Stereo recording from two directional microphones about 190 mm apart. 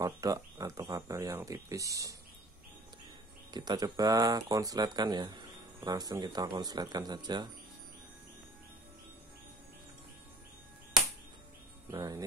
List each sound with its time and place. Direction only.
0.0 s speech: 20° right (ahead or behind)
3.5 s speech: 20° right (ahead or behind)
11.9 s speech: 20° right (ahead or behind)